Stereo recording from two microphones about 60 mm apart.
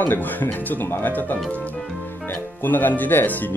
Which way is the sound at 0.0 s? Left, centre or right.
Left.